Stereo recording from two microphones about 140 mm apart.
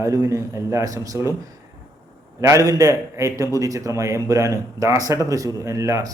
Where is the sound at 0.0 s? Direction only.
20° right (ahead or behind).